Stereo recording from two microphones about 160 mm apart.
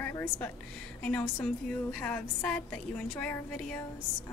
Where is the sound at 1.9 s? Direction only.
10° left (ahead or behind).